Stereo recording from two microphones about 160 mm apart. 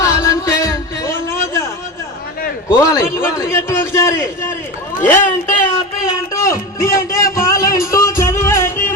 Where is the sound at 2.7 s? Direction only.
20° left (ahead or behind).